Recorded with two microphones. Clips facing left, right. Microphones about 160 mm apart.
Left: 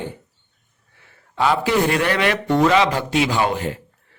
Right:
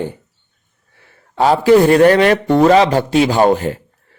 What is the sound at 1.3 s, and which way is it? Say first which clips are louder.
Speech: right 8 dB; 40° right (ahead or behind).